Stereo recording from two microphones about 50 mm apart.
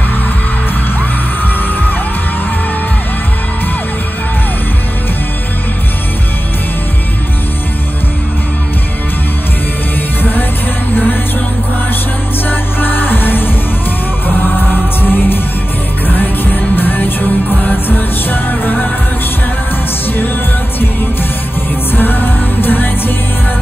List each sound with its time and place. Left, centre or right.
12.4 s music: left
16.2 s music: left
21.9 s music: left